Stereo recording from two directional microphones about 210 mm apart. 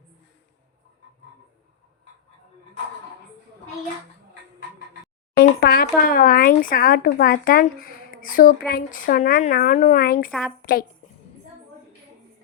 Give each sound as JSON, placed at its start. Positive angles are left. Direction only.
{"t": 5.4, "sound": "a woman's voice", "side_deg": 45}